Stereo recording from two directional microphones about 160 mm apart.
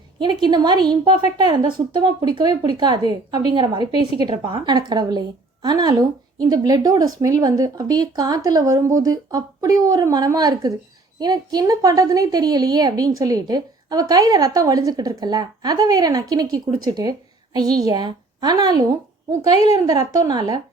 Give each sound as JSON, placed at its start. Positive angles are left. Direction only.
{"t": 0.4, "sound": "a woman's voice", "side_deg": -25}